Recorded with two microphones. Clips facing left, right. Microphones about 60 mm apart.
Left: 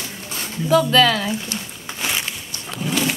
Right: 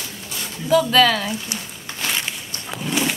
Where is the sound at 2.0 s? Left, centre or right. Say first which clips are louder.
Even; centre.